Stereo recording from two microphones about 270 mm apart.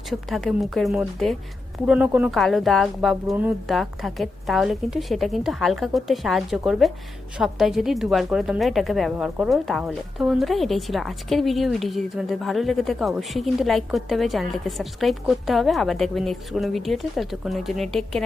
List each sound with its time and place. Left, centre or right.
0.1 s a woman's voice: centre